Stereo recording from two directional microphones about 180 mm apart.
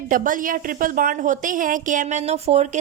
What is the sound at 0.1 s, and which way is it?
A woman's voice, 50° right (ahead or behind).